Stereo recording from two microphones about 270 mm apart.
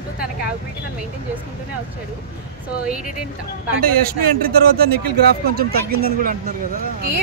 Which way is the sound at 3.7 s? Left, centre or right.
Right.